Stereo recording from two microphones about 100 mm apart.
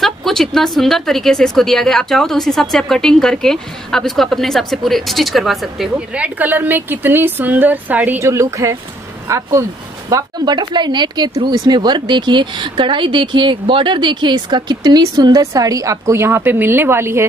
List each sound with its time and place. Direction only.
0.0 s speech: 5° left (ahead or behind)
5.9 s a woman's voice: 15° right (ahead or behind)
8.2 s speech: 30° right (ahead or behind)